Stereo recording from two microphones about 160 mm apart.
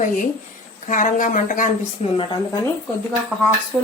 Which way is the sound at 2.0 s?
35° left (ahead or behind).